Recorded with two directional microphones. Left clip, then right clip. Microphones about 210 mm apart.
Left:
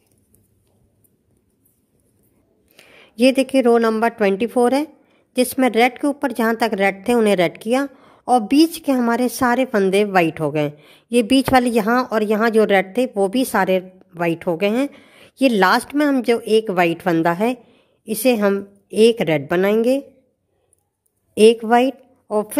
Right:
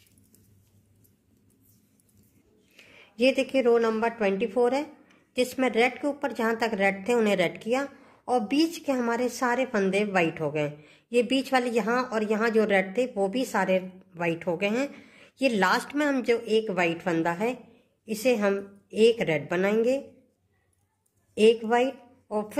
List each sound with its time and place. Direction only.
2.7 s a woman's voice: 50° left (ahead or behind)
21.4 s a woman's voice: 50° left (ahead or behind)